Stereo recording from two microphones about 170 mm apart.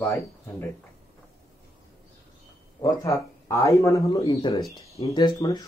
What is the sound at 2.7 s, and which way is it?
A man's voice, 20° left (ahead or behind).